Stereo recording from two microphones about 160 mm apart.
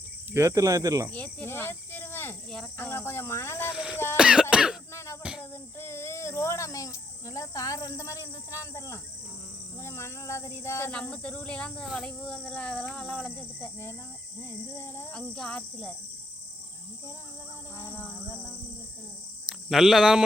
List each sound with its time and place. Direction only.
0.3 s speech: 20° right (ahead or behind)
1.1 s speech: 10° left (ahead or behind)
3.7 s a sound: 5° right (ahead or behind)
3.9 s speech: 15° left (ahead or behind)
4.2 s cough: 5° right (ahead or behind)
5.4 s a child's voice: 15° left (ahead or behind)
17.7 s speech: 15° left (ahead or behind)
19.5 s speech: 5° right (ahead or behind)